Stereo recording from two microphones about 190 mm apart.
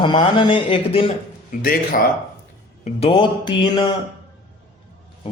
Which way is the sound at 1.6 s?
50° left (ahead or behind).